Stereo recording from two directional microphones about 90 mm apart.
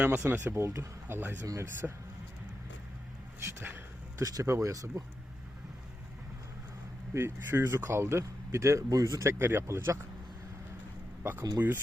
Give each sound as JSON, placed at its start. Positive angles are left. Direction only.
{"t": 0.1, "sound": "speech", "side_deg": -30}
{"t": 1.8, "sound": "speech", "side_deg": -10}
{"t": 3.4, "sound": "speech", "side_deg": -25}
{"t": 4.2, "sound": "speech", "side_deg": -40}
{"t": 7.1, "sound": "speech", "side_deg": -30}
{"t": 11.2, "sound": "speech", "side_deg": -25}